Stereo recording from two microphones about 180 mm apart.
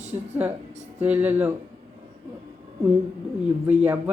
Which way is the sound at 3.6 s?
10° right (ahead or behind).